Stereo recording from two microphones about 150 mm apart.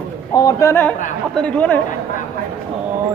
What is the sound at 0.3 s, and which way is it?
A man's voice, 25° left (ahead or behind).